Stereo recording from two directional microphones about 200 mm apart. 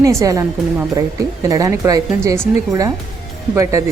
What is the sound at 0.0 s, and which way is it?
A woman's voice, 15° right (ahead or behind).